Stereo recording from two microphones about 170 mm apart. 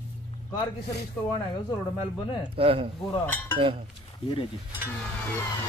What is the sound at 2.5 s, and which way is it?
Speech, 35° right (ahead or behind).